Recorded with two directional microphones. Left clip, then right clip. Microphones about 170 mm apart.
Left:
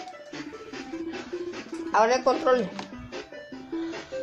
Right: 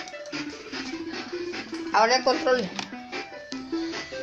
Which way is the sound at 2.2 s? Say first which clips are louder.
Even; 20° left (ahead or behind).